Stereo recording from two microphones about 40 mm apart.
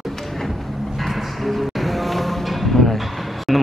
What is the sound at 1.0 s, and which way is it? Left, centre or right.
Music, centre.